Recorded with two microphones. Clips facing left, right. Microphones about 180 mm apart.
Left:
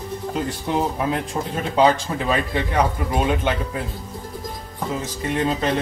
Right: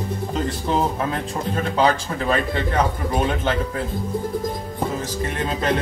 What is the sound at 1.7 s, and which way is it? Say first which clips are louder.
Speech: left 4 dB; 20° left (ahead or behind).